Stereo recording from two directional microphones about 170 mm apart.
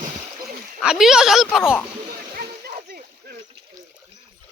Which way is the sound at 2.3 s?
60° right (ahead or behind).